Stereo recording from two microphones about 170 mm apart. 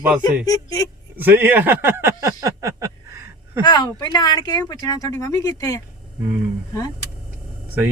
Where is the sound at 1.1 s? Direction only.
10° right (ahead or behind).